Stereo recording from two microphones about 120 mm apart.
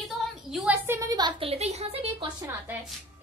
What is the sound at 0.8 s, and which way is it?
Speech, 25° right (ahead or behind).